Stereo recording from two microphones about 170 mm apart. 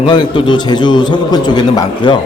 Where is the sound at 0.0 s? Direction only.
30° left (ahead or behind).